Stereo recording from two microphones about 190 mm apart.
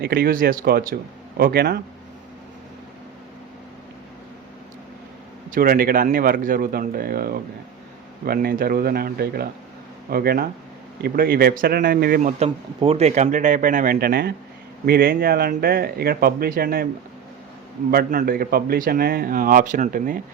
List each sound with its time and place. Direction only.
0.0 s a man's voice: 55° right (ahead or behind)
5.5 s a man's voice: 50° right (ahead or behind)
12.4 s a man's voice: 30° right (ahead or behind); by 16.9 s 50° right (ahead or behind)
17.9 s a man's voice: 50° right (ahead or behind)